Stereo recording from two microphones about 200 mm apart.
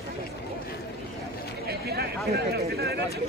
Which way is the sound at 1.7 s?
50° right (ahead or behind).